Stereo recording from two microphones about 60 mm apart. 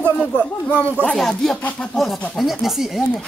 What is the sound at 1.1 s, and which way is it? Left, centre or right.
Speech, centre.